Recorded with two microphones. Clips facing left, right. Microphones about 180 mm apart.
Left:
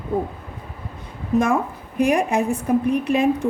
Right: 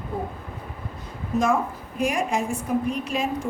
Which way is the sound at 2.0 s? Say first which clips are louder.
Left 6 dB; 60° left (ahead or behind).